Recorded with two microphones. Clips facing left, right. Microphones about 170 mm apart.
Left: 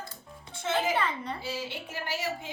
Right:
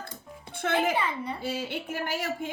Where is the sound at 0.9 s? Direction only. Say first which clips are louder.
Right 1 dB; 10° right (ahead or behind).